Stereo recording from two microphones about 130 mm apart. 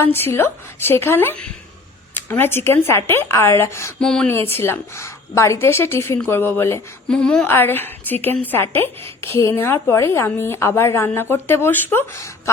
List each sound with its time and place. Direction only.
0.0 s a woman's voice: 20° left (ahead or behind)
4.0 s speech: 5° left (ahead or behind)
4.5 s a woman's voice: 20° left (ahead or behind)
7.1 s a woman's voice: 5° left (ahead or behind)